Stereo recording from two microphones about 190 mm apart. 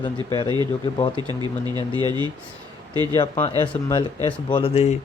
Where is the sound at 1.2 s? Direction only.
20° right (ahead or behind).